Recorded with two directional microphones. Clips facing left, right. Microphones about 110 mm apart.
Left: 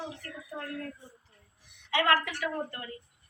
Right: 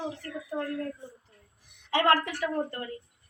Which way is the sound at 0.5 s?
45° right (ahead or behind).